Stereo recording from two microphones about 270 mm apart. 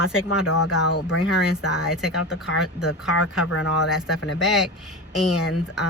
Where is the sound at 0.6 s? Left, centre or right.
Left.